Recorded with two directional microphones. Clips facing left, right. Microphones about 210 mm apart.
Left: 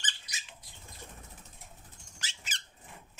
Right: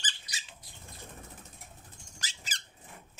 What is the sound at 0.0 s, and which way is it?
Squeak, 30° right (ahead or behind).